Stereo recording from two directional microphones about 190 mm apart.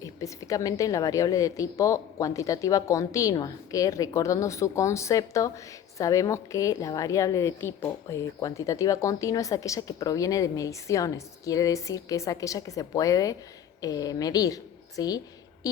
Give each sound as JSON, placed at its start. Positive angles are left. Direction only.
{"t": 0.0, "sound": "a woman's voice", "side_deg": 15}